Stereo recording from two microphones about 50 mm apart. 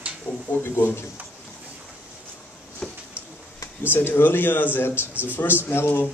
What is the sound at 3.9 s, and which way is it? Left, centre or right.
Speech, left.